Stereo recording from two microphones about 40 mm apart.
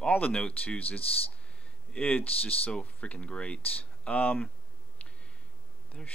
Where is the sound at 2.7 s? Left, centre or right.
Left.